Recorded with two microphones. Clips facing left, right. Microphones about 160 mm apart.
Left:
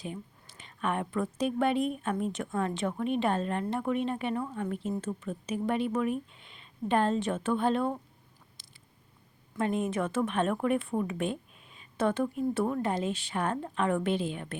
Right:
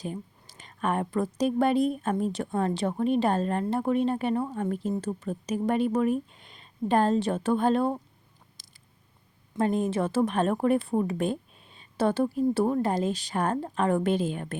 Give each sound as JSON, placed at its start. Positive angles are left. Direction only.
{"t": 0.0, "sound": "a woman's voice", "side_deg": -40}
{"t": 8.6, "sound": "a sound", "side_deg": -40}
{"t": 9.6, "sound": "a woman's voice", "side_deg": -35}